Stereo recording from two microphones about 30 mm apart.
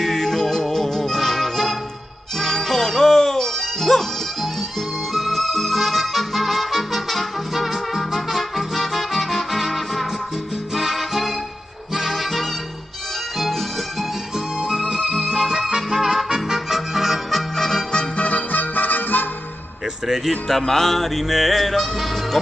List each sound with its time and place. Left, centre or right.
0.0 s music: centre
14.3 s music: centre
17.6 s music: centre
18.1 s music: left
18.5 s music: left
20.1 s speech: centre
20.6 s music: centre
20.9 s music: centre
21.7 s music: centre